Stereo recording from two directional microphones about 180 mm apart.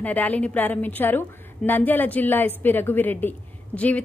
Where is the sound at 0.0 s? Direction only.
10° left (ahead or behind).